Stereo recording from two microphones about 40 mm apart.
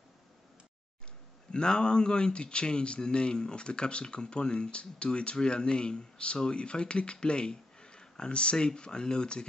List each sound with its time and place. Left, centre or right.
1.5 s speech: left